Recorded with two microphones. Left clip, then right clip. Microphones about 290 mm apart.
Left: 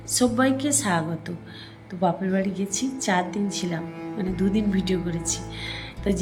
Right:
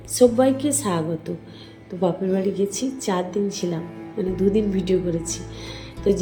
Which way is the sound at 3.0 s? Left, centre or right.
Left.